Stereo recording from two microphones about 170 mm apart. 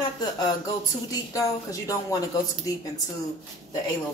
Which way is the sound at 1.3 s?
20° left (ahead or behind).